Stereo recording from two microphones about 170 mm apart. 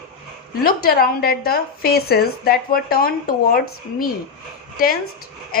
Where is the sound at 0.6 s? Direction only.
60° left (ahead or behind).